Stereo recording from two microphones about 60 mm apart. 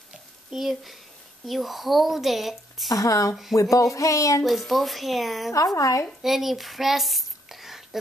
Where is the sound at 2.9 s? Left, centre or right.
Left.